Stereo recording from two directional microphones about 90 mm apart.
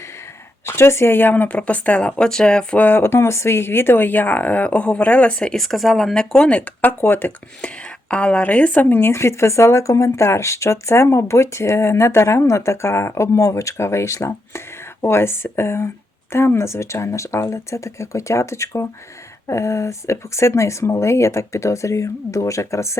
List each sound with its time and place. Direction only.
0.6 s speech: 30° left (ahead or behind)